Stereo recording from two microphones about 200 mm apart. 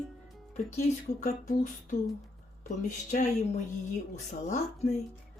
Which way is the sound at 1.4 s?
45° left (ahead or behind).